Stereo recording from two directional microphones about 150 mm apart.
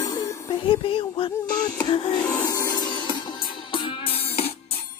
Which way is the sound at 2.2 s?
10° left (ahead or behind).